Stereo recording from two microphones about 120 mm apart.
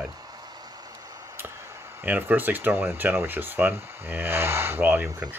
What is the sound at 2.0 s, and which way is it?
Speech, 15° right (ahead or behind).